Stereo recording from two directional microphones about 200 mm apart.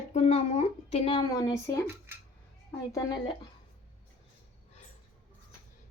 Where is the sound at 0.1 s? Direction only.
30° left (ahead or behind).